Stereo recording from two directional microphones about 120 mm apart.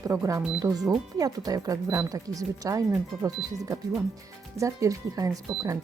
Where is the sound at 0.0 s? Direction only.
25° right (ahead or behind).